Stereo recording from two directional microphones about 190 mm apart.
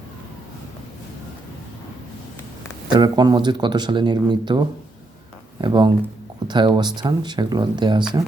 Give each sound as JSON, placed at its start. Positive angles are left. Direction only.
{"t": 3.0, "sound": "speech", "side_deg": -20}